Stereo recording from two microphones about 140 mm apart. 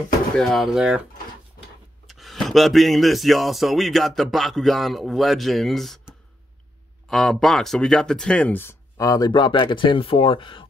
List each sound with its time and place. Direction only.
0.4 s speech: centre (ahead or behind)
2.0 s speech: centre (ahead or behind); by 10.7 s 40° left (ahead or behind)